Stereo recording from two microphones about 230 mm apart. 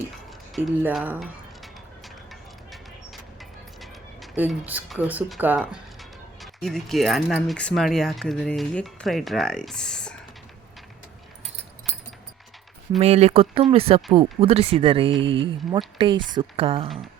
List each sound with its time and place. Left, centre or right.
0.5 s music: centre
3.8 s speech: centre
13.0 s speech: right